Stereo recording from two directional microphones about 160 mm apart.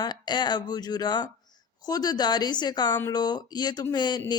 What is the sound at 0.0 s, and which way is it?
A woman's voice, 25° left (ahead or behind).